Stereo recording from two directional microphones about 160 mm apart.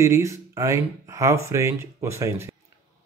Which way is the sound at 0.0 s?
15° right (ahead or behind).